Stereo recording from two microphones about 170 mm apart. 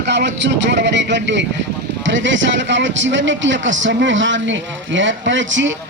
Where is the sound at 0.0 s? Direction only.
85° right.